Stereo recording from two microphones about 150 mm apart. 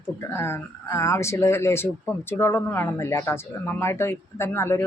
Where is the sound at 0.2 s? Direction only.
15° left (ahead or behind).